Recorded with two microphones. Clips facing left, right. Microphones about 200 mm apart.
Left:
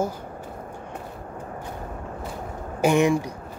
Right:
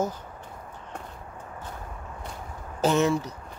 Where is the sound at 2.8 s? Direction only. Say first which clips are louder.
Left 3 dB; 15° left (ahead or behind).